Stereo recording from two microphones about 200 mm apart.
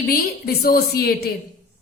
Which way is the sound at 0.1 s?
50° left (ahead or behind).